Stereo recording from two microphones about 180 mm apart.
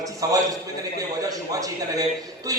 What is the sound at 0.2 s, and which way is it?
A man's voice, 20° right (ahead or behind).